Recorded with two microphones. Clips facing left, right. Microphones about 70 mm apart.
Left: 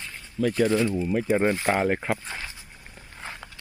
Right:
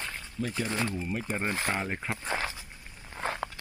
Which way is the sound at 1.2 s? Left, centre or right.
Left.